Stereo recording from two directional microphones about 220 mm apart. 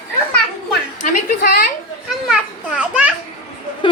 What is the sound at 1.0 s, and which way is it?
Speech, 40° left (ahead or behind).